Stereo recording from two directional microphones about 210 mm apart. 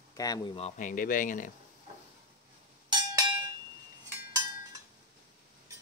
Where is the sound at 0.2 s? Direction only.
15° left (ahead or behind).